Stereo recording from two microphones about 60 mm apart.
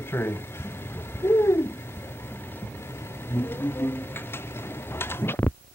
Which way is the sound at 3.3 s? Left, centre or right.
Left.